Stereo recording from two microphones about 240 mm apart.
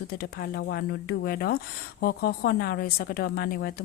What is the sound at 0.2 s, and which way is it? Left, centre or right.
Speech, left.